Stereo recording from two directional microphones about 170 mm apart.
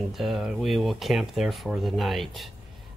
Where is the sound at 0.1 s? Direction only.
Centre (ahead or behind).